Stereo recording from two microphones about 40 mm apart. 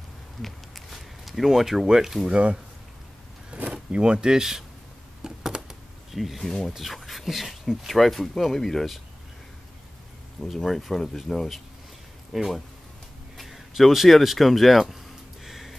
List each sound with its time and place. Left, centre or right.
0.4 s a sound: centre
1.9 s speech: centre
2.3 s speech: right
3.5 s a sound: right
3.9 s speech: right
5.2 s computer keyboard: centre
6.1 s speech: centre
10.4 s speech: centre
12.3 s speech: centre
15.4 s music: centre